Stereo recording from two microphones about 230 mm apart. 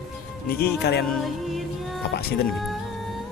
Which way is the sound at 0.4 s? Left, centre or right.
Left.